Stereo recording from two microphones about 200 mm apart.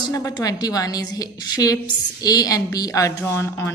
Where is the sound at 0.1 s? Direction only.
15° left (ahead or behind).